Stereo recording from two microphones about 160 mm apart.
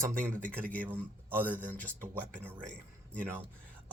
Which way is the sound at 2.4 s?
15° right (ahead or behind).